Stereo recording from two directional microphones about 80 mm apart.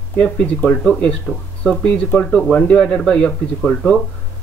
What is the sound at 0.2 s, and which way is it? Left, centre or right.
Speech, centre.